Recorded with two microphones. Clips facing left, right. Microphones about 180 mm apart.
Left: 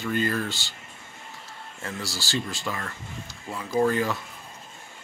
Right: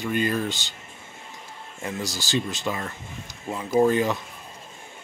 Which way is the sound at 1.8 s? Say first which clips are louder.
Right 4 dB; 20° right (ahead or behind).